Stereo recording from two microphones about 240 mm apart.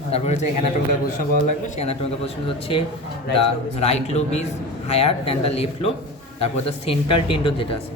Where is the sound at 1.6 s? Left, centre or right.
Left.